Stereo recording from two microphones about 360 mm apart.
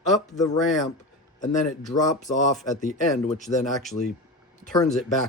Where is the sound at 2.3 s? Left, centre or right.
Left.